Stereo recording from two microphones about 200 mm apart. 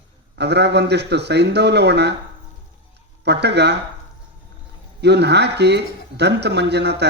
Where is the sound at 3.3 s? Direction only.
55° right (ahead or behind).